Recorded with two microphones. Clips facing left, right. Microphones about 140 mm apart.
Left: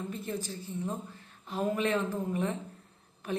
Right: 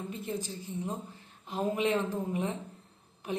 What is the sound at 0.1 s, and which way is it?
A woman's voice, 15° right (ahead or behind).